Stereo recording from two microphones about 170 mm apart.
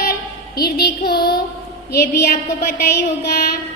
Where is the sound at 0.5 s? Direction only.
65° left (ahead or behind).